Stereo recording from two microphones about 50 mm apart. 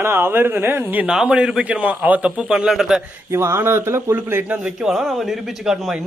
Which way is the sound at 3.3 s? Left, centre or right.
Right.